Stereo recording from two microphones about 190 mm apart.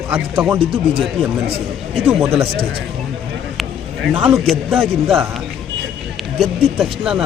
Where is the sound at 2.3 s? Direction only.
30° right (ahead or behind).